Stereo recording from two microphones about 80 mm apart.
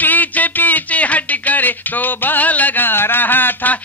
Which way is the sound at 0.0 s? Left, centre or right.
Left.